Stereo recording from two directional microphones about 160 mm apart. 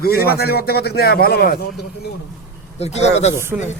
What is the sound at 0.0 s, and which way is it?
A man's voice, 75° left (ahead or behind).